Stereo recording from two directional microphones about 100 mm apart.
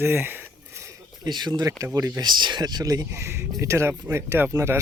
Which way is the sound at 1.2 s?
45° right (ahead or behind).